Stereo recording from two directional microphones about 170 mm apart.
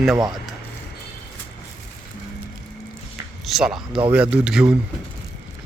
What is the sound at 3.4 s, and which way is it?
Speech, centre (ahead or behind).